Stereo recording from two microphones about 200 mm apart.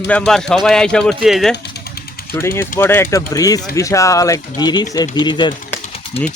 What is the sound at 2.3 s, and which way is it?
Speech, 15° left (ahead or behind).